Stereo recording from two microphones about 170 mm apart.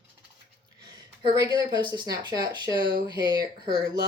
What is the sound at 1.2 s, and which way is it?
Speech, 25° right (ahead or behind).